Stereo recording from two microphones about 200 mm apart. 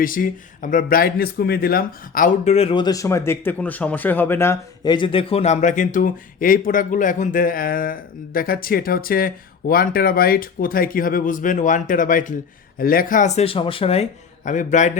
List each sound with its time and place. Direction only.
0.0 s speech: 45° left (ahead or behind)